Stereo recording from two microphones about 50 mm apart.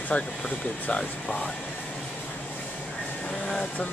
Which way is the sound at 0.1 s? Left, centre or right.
Left.